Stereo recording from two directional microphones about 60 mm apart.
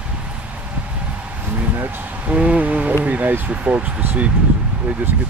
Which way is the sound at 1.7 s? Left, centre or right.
Right.